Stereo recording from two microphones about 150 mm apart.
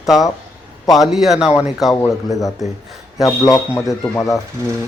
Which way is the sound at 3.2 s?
20° left (ahead or behind).